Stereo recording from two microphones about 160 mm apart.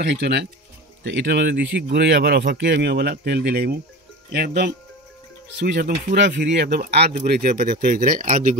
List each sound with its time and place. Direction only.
0.0 s speech: 90° right
7.2 s speech: 70° right (ahead or behind)
7.7 s speech: 55° right (ahead or behind)